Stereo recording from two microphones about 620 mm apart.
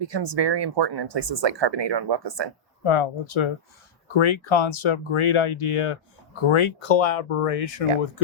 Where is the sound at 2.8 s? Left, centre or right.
Left.